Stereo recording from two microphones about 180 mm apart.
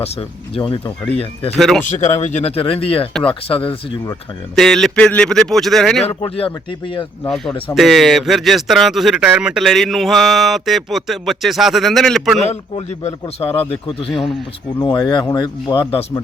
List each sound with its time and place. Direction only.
0.0 s speech: 30° left (ahead or behind)
1.5 s speech: centre (ahead or behind)
1.9 s speech: 40° left (ahead or behind)
4.5 s speech: centre (ahead or behind)
6.1 s speech: 30° left (ahead or behind)
7.3 s speech: 5° left (ahead or behind)
12.5 s speech: 35° left (ahead or behind)